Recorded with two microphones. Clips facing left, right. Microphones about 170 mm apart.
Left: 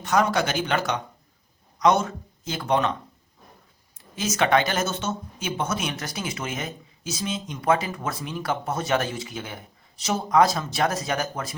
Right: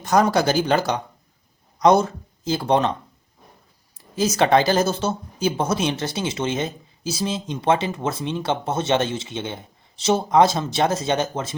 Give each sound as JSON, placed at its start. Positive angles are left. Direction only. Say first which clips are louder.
{"t": 0.0, "sound": "speech", "louder": "right 4 dB", "side_deg": -35}
{"t": 3.9, "sound": "speech", "louder": "right 6 dB", "side_deg": -35}